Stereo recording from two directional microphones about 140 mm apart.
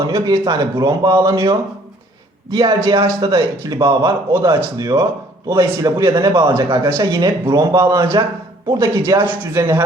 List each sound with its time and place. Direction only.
0.1 s a man's voice: 25° right (ahead or behind)